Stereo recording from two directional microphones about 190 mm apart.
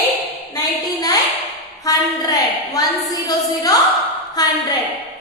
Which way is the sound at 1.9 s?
20° left (ahead or behind).